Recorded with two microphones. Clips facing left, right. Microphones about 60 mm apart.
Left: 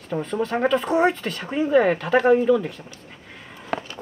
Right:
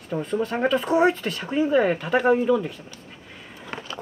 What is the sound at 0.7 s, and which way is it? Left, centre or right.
Speech, left.